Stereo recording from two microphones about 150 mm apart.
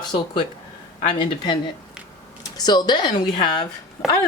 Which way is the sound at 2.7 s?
30° left (ahead or behind).